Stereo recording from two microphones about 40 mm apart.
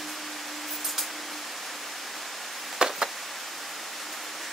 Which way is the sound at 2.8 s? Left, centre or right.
Centre.